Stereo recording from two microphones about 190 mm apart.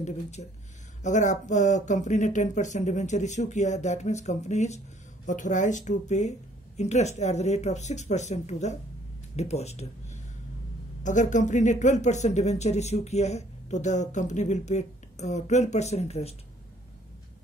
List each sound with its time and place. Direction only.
0.0 s speech: 35° left (ahead or behind)